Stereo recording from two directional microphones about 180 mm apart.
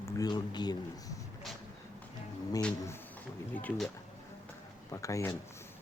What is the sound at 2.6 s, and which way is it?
Speech, 10° left (ahead or behind).